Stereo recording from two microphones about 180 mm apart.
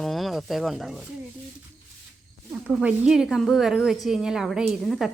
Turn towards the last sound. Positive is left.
turn(degrees=0)  # may be behind; listen again after turning